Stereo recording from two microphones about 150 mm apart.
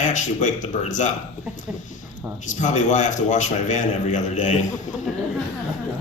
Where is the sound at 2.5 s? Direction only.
55° left (ahead or behind).